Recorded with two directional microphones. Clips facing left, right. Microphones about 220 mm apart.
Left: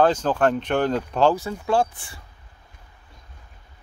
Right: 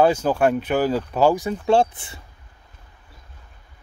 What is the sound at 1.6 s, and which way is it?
Speech, 25° right (ahead or behind).